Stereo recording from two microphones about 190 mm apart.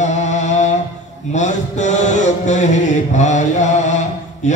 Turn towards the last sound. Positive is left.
turn(degrees=40)  # may be behind; listen again after turning